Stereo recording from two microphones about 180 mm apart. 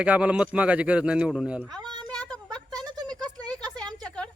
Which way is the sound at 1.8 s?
25° right (ahead or behind).